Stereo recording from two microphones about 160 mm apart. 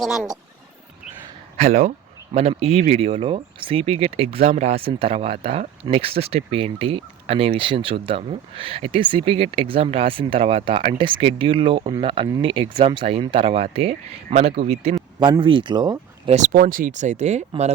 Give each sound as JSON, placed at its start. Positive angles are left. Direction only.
{"t": 0.0, "sound": "speech", "side_deg": 0}
{"t": 1.5, "sound": "speech", "side_deg": -45}
{"t": 16.3, "sound": "speech", "side_deg": -50}
{"t": 16.6, "sound": "speech", "side_deg": -60}